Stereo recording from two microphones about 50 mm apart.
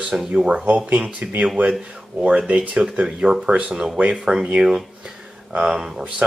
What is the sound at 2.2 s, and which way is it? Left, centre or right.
Speech, right.